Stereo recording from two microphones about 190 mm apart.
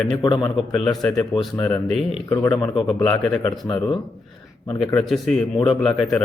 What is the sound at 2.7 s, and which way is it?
Speech, 25° left (ahead or behind).